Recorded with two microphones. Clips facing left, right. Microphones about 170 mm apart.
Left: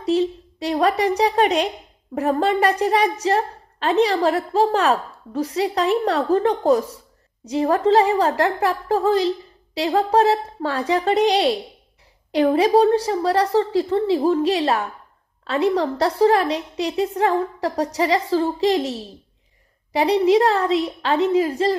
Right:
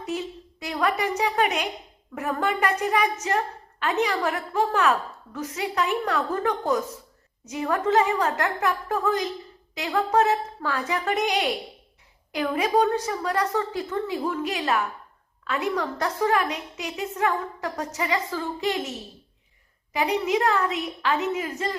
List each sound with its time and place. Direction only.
0.0 s a woman's voice: 35° left (ahead or behind)